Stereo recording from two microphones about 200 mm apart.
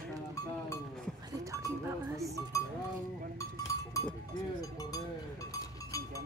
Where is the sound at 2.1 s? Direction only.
15° right (ahead or behind).